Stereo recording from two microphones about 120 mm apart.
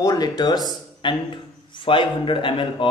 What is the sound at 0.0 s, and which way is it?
A man's voice, 35° left (ahead or behind).